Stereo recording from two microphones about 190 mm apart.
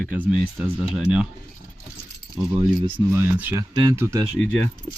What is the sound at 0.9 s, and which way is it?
Speech, 5° right (ahead or behind).